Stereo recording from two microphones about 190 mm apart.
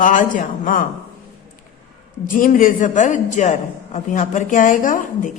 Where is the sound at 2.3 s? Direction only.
45° left (ahead or behind).